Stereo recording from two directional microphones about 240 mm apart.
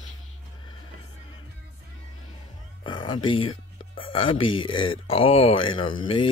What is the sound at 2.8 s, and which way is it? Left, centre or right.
Speech, centre.